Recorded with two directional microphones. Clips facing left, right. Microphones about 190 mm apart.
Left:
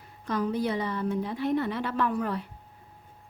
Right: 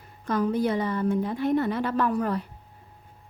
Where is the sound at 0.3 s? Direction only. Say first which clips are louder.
Right 3 dB; 50° right (ahead or behind).